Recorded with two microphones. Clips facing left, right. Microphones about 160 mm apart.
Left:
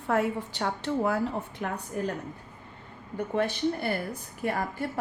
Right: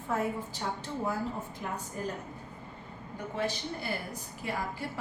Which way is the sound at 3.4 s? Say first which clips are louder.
Left 7 dB; 55° left (ahead or behind).